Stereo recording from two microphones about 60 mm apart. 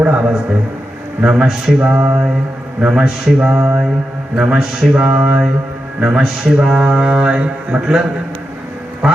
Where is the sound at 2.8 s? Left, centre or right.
Centre.